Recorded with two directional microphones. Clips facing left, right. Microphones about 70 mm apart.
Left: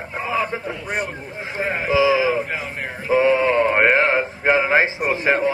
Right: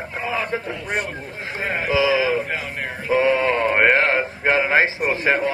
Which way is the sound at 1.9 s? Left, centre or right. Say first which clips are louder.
Left 2 dB; centre.